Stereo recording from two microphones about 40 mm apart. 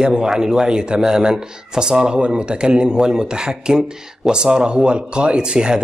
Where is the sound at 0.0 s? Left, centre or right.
Centre.